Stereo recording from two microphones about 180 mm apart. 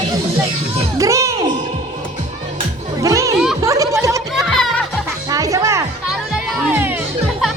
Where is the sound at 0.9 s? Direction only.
20° right (ahead or behind).